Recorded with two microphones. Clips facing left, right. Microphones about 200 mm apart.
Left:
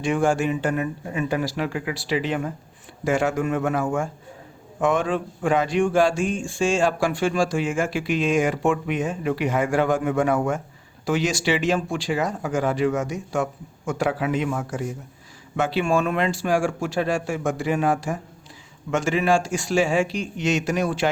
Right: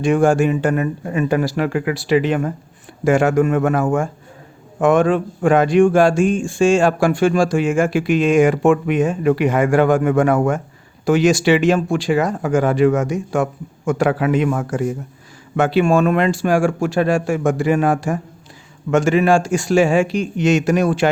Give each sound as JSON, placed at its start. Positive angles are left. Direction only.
{"t": 0.0, "sound": "a man's voice", "side_deg": -50}
{"t": 11.0, "sound": "a man's voice", "side_deg": -50}